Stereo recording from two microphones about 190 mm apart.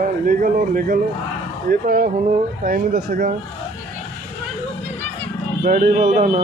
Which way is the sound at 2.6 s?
50° right (ahead or behind).